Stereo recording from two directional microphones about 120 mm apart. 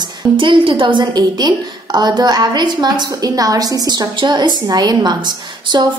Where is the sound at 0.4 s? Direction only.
45° right (ahead or behind).